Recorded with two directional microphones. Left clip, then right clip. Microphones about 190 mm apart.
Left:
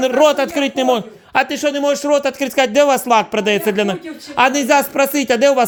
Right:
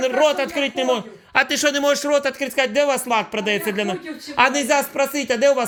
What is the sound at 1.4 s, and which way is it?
Speech, 20° left (ahead or behind).